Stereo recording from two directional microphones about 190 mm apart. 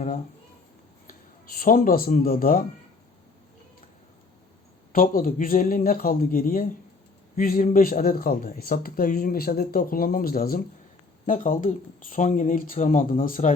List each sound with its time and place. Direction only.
1.5 s speech: 50° left (ahead or behind)
4.9 s speech: 45° left (ahead or behind)